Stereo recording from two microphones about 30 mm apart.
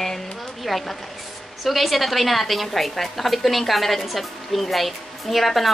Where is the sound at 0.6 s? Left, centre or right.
Centre.